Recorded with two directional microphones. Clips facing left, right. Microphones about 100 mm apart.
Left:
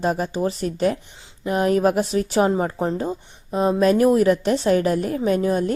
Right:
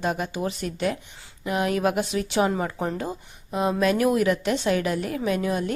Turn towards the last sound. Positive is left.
turn(degrees=35)  # may be behind; listen again after turning